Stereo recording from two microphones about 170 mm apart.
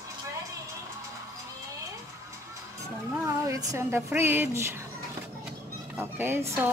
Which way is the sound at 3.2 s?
20° right (ahead or behind).